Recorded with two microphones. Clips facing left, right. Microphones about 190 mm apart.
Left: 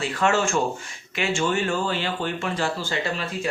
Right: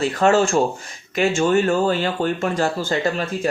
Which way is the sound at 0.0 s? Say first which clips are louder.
Right 6 dB; 35° right (ahead or behind).